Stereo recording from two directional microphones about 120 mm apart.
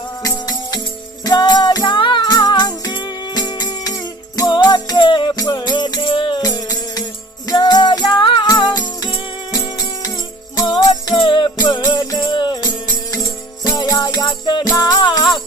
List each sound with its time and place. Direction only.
0.2 s music: 35° left (ahead or behind)
10.6 s jingle bell: 30° left (ahead or behind)
11.2 s music: 45° left (ahead or behind)
12.6 s music: 30° left (ahead or behind)